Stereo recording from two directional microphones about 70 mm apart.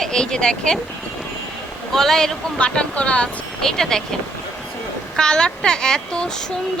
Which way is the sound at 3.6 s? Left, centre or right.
Centre.